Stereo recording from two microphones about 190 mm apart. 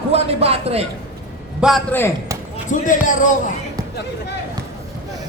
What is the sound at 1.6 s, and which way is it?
Speech, centre (ahead or behind).